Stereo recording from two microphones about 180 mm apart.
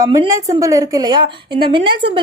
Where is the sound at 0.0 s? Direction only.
20° right (ahead or behind).